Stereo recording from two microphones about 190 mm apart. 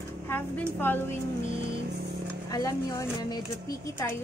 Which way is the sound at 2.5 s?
15° left (ahead or behind).